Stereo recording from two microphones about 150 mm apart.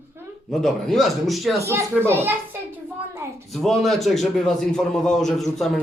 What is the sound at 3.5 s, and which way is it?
A man's voice, centre (ahead or behind).